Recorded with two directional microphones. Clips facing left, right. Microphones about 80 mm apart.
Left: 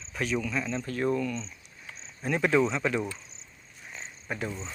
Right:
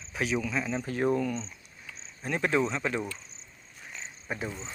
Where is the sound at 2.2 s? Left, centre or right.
Centre.